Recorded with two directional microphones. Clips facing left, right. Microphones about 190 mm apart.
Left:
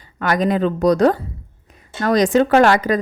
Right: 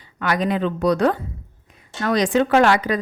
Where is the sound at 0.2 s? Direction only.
45° left (ahead or behind).